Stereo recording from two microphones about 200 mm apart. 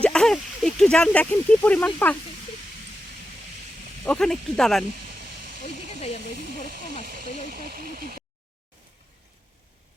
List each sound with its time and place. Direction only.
0.0 s a sound: 5° left (ahead or behind)
4.0 s speech: 5° left (ahead or behind)
6.0 s speech: 30° left (ahead or behind)
6.5 s speech: 50° right (ahead or behind)